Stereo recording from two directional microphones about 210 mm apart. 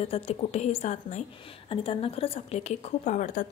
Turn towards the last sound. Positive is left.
turn(degrees=35)  # may be behind; listen again after turning